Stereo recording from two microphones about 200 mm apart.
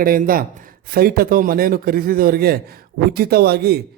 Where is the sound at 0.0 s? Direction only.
45° right (ahead or behind).